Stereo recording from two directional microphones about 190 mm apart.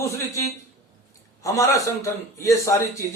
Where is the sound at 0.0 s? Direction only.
15° left (ahead or behind).